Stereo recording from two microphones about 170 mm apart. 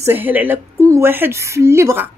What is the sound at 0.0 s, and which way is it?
A woman's voice, 10° right (ahead or behind).